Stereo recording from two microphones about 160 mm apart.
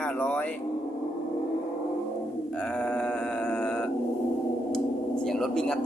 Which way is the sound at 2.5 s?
5° left (ahead or behind).